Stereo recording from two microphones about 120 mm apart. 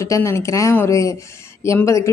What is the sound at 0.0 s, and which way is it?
A woman's voice, 25° left (ahead or behind).